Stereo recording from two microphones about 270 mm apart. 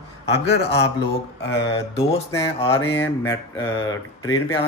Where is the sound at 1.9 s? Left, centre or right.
Left.